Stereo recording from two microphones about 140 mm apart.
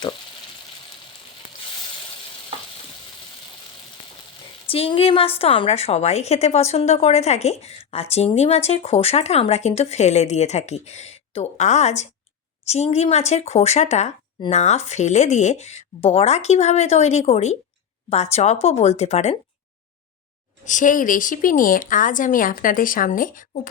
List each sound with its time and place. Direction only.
4.6 s speech: 40° left (ahead or behind)
20.7 s a woman's voice: 65° left (ahead or behind)